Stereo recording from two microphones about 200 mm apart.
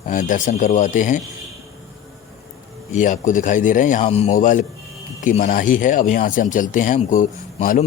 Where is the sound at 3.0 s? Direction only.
40° left (ahead or behind).